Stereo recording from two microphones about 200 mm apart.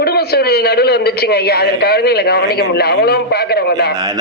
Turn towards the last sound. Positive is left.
turn(degrees=50)  # may be behind; listen again after turning